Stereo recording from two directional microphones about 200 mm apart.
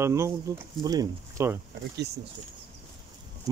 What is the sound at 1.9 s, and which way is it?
Speech, 55° right (ahead or behind).